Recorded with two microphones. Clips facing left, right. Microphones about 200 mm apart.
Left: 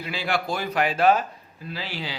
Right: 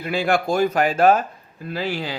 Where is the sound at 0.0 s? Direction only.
50° right (ahead or behind).